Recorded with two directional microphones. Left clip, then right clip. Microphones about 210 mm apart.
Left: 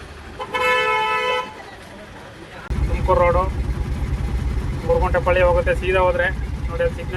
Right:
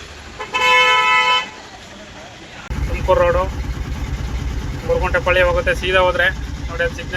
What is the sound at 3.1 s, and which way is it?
Speech, centre (ahead or behind).